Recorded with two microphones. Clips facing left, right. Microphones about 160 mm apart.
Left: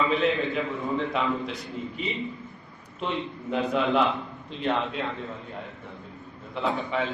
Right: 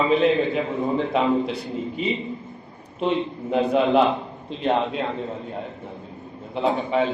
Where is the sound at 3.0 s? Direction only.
25° right (ahead or behind).